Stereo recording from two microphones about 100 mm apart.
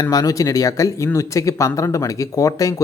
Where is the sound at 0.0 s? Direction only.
40° left (ahead or behind).